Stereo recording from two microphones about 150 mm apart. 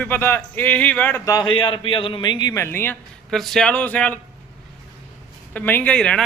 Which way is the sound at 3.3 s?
Centre (ahead or behind).